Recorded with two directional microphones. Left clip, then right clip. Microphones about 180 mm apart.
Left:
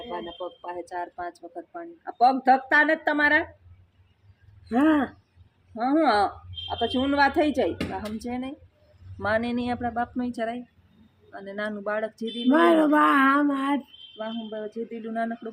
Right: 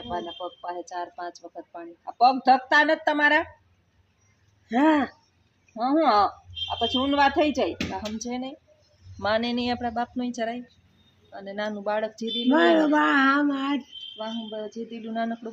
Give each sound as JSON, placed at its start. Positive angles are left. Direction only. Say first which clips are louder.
{"t": 0.1, "sound": "speech", "louder": "right 3 dB", "side_deg": -35}
{"t": 4.7, "sound": "speech", "louder": "right 1 dB", "side_deg": -5}
{"t": 12.5, "sound": "a sound", "louder": "left 1 dB", "side_deg": 15}
{"t": 14.2, "sound": "speech", "louder": "left 1 dB", "side_deg": -15}